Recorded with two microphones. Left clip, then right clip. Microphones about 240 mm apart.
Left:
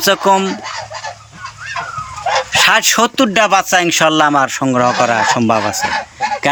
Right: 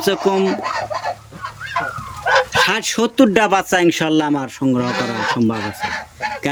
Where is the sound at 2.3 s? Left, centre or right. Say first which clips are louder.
Left 3 dB; centre.